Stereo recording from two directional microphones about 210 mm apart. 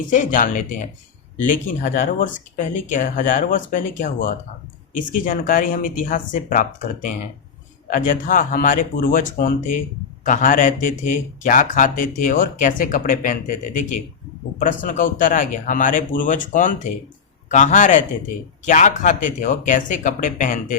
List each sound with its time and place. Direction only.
0.1 s a man's voice: 40° left (ahead or behind)
14.6 s a man's voice: 40° left (ahead or behind)